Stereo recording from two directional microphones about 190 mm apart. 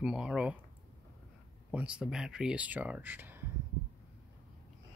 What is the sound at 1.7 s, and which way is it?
Speech, 5° right (ahead or behind).